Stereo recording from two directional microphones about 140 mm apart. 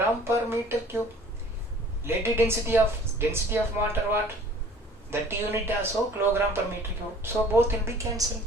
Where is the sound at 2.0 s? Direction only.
15° right (ahead or behind).